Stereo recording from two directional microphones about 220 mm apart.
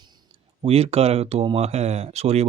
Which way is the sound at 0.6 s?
25° right (ahead or behind).